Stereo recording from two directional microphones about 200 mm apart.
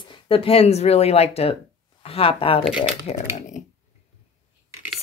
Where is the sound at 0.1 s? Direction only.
25° left (ahead or behind).